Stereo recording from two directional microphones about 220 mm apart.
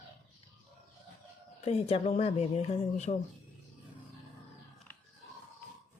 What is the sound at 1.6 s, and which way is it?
Speech, 30° left (ahead or behind).